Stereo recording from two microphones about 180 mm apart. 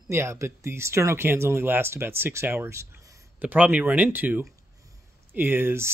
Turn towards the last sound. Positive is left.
turn(degrees=-15)  # may be behind; listen again after turning